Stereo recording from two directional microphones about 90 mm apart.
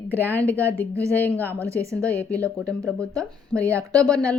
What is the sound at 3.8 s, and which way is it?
Speech, 40° right (ahead or behind).